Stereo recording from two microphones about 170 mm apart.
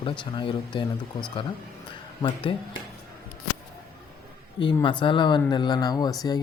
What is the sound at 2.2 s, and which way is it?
Speech, 30° left (ahead or behind).